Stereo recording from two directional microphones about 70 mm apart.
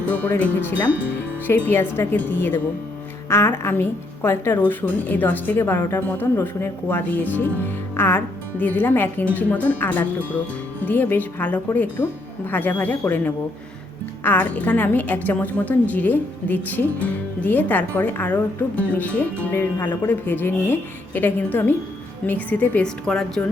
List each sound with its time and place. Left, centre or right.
1.5 s a woman's voice: left
23.0 s a woman's voice: centre